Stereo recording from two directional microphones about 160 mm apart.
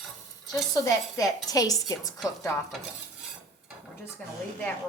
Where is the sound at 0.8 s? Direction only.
20° left (ahead or behind).